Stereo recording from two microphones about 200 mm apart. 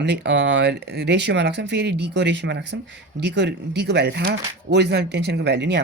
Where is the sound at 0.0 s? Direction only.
60° right (ahead or behind).